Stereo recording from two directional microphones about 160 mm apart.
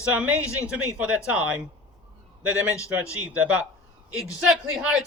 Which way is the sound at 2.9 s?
5° right (ahead or behind).